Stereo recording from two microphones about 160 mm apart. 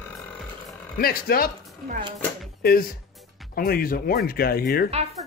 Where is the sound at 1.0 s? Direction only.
65° left (ahead or behind).